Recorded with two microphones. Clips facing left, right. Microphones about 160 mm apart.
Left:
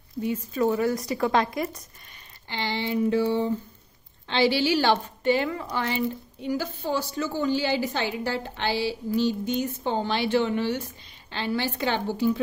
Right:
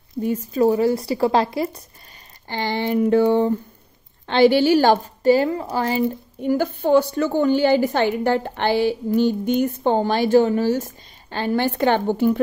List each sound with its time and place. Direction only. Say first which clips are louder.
0.2 s a woman's voice: right 6 dB; 35° right (ahead or behind)
2.4 s a woman's voice: right 6 dB; 45° right (ahead or behind)
6.4 s a woman's voice: right 8 dB; 55° right (ahead or behind)